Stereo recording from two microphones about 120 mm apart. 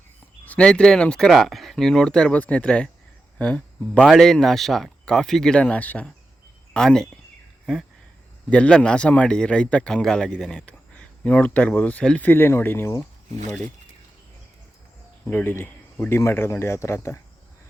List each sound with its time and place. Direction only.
0.4 s speech: 10° left (ahead or behind)
8.4 s speech: 10° left (ahead or behind)
15.2 s speech: 15° left (ahead or behind)